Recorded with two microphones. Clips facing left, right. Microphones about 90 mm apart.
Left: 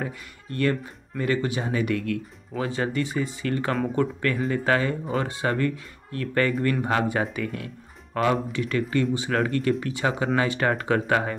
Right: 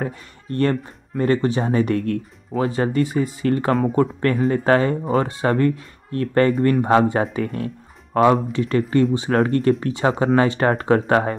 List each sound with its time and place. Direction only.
0.0 s speech: 40° right (ahead or behind)